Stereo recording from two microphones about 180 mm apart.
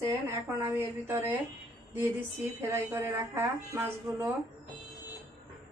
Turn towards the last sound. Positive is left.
turn(degrees=-15)  # may be behind; listen again after turning